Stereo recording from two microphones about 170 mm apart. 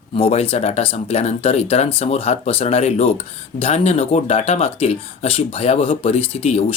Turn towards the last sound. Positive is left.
turn(degrees=35)  # may be behind; listen again after turning